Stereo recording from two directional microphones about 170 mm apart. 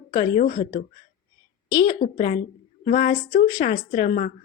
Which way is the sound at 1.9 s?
40° left (ahead or behind).